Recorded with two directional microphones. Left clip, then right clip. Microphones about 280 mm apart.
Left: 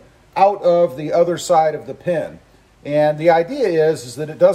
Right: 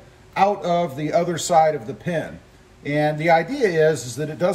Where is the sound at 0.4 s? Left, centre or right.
Centre.